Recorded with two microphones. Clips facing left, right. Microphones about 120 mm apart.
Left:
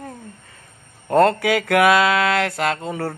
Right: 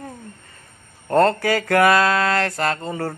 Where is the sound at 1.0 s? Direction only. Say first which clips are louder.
Left 1 dB; centre (ahead or behind).